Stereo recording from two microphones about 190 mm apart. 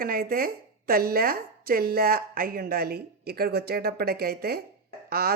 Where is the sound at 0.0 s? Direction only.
50° right (ahead or behind).